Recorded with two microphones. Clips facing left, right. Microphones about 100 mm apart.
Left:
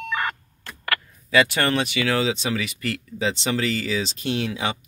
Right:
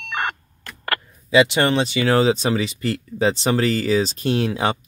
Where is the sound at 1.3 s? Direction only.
20° right (ahead or behind).